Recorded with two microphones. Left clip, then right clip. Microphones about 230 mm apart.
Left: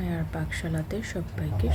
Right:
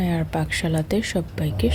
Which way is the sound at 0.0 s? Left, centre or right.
Right.